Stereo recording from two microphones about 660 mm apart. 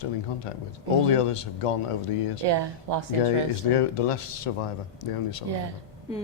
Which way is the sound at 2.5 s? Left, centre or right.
Right.